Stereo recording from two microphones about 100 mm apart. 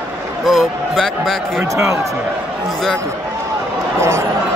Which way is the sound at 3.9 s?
25° right (ahead or behind).